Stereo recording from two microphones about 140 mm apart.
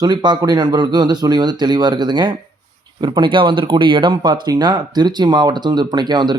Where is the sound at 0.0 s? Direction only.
30° right (ahead or behind).